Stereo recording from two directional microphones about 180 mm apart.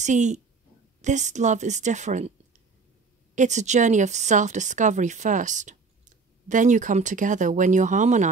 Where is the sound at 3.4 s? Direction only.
40° right (ahead or behind).